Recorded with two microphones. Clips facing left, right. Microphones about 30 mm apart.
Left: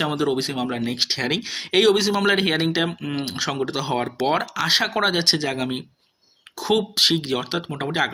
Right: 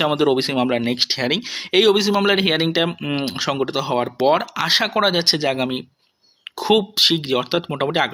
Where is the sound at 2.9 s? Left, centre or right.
Right.